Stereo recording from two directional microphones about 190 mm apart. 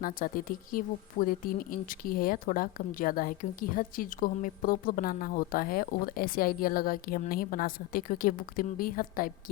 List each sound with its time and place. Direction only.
0.0 s speech: 50° left (ahead or behind)